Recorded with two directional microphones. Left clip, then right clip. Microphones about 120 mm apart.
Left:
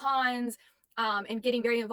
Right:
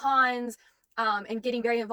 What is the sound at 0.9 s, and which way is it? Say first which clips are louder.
Speech: right 2 dB; 20° left (ahead or behind).